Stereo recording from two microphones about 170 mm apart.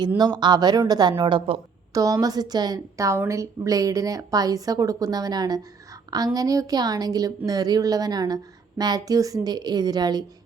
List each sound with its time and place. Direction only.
0.2 s a woman's voice: 25° right (ahead or behind)
1.9 s a woman's voice: 20° right (ahead or behind)